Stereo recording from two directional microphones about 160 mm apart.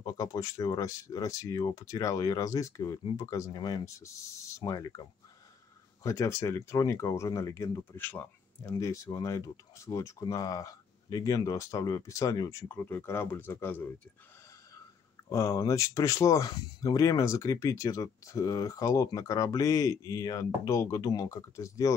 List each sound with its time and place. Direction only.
0.0 s speech: 20° left (ahead or behind)
6.0 s speech: 20° left (ahead or behind)
15.2 s speech: 20° left (ahead or behind)